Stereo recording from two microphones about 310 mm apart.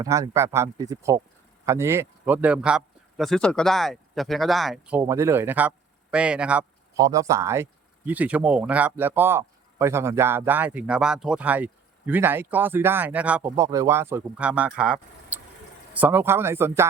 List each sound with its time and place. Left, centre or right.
0.0 s speech: centre
16.0 s speech: centre